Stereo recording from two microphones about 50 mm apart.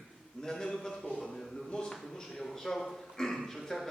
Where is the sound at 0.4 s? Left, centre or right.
Centre.